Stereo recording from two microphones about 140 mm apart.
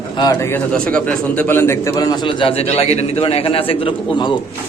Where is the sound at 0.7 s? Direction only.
10° left (ahead or behind); by 4.4 s 35° left (ahead or behind).